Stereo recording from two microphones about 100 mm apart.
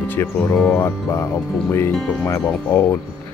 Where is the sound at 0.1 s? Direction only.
20° left (ahead or behind).